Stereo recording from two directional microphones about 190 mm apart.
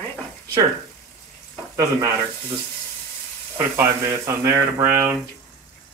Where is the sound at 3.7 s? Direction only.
15° right (ahead or behind).